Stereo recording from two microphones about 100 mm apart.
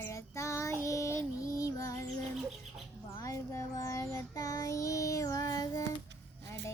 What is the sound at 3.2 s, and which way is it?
Child singing, 30° left (ahead or behind).